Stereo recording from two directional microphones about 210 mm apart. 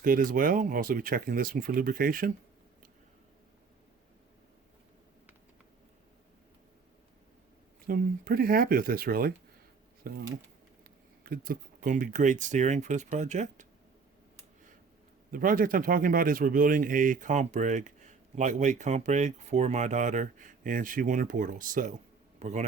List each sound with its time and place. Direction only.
0.0 s speech: 40° right (ahead or behind)
7.9 s speech: 45° right (ahead or behind)
15.3 s a man's voice: 40° right (ahead or behind)